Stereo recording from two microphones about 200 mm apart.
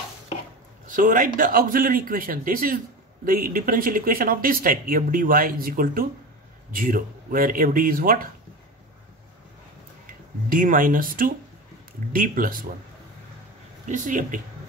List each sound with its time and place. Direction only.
0.8 s speech: 45° right (ahead or behind)
10.5 s speech: 45° right (ahead or behind)
13.8 s speech: 40° right (ahead or behind)